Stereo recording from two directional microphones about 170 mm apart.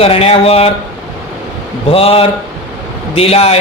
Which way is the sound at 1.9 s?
35° left (ahead or behind).